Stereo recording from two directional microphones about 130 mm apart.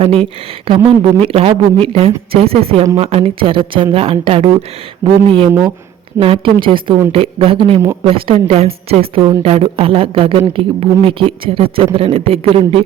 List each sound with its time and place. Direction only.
0.0 s a man's voice: 45° right (ahead or behind)
5.0 s speech: 20° right (ahead or behind)
6.1 s a woman's voice: 45° right (ahead or behind)